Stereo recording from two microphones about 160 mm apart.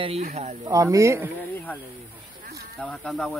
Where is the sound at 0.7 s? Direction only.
20° right (ahead or behind).